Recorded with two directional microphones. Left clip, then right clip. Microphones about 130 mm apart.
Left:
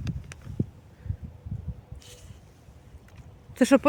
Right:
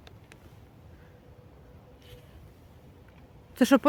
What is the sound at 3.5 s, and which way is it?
Speech, centre (ahead or behind).